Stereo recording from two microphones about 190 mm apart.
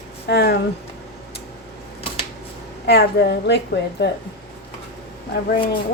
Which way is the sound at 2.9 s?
60° left (ahead or behind).